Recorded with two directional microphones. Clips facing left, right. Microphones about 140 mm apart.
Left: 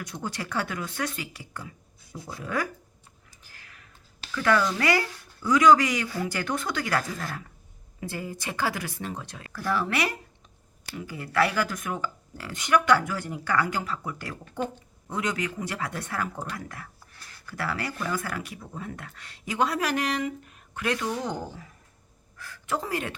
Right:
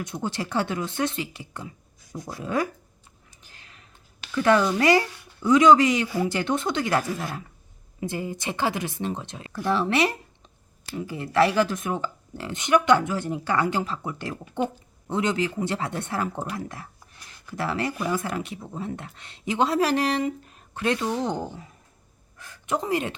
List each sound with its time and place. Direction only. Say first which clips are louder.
0.0 s speech: right 4 dB; 25° right (ahead or behind)
3.4 s a sound: right 1 dB; 25° right (ahead or behind)
4.3 s speech: right 4 dB; 25° right (ahead or behind)